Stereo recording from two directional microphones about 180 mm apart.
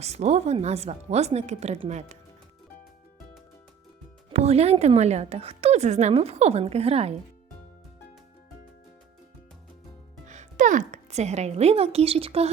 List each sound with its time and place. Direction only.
0.0 s a woman's voice: 35° right (ahead or behind)
4.3 s a woman's voice: 35° right (ahead or behind)
10.2 s speech: 45° right (ahead or behind)